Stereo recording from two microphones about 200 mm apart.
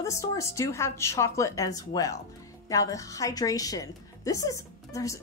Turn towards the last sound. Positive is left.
turn(degrees=15)  # may be behind; listen again after turning